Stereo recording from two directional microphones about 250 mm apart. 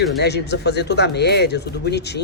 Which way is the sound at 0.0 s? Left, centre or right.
Left.